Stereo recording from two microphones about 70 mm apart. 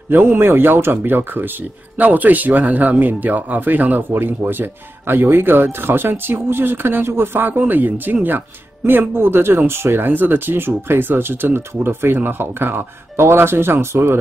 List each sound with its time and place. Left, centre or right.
0.1 s speech: right